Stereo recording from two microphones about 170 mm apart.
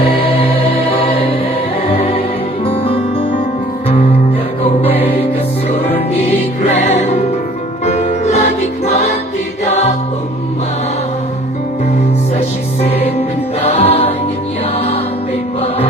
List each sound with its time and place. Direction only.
0.0 s music: 35° left (ahead or behind)
4.6 s music: 35° left (ahead or behind)
6.7 s music: 40° left (ahead or behind)
13.6 s music: 35° left (ahead or behind)